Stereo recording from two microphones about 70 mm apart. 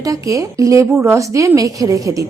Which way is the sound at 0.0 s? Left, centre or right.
Right.